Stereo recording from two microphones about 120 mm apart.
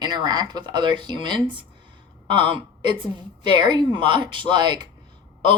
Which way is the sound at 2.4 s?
45° right (ahead or behind).